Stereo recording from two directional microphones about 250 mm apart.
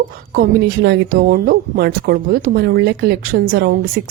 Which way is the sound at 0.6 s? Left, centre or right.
Right.